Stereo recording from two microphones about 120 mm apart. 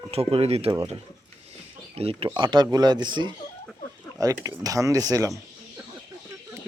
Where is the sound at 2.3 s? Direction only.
40° right (ahead or behind).